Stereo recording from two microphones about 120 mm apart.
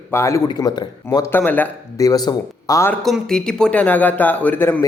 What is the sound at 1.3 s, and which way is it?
Speech, 15° left (ahead or behind).